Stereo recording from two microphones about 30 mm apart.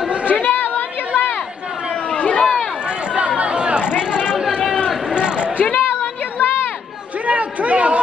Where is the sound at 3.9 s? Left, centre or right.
Left.